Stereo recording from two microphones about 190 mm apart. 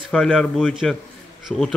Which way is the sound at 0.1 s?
5° left (ahead or behind).